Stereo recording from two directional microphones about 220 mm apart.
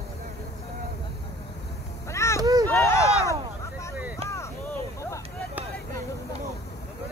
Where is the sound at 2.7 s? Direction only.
10° left (ahead or behind).